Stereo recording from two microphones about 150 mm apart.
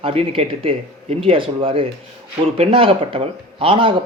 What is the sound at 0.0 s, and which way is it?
Speech, 40° right (ahead or behind).